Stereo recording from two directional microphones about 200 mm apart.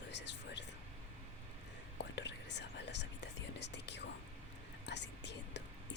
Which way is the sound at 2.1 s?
60° left (ahead or behind).